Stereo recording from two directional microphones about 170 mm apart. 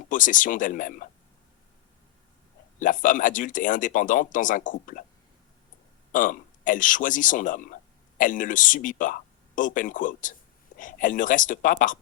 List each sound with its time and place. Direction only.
0.1 s speech: 50° left (ahead or behind)
2.7 s speech: 50° left (ahead or behind)
6.1 s speech: 50° left (ahead or behind)